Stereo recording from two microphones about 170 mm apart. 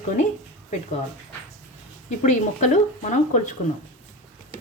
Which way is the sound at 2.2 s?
45° left (ahead or behind).